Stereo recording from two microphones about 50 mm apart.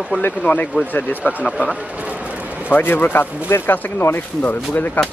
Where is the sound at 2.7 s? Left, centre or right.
Left.